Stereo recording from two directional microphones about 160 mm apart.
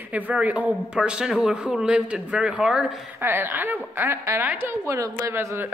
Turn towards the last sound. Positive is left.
turn(degrees=-15)  # may be behind; listen again after turning